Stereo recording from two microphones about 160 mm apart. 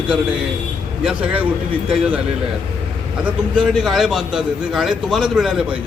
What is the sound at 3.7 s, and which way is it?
A man's voice, centre (ahead or behind).